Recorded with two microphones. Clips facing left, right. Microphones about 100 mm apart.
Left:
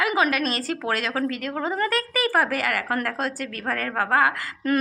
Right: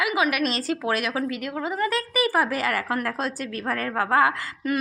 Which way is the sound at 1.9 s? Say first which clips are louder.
Even; 20° right (ahead or behind).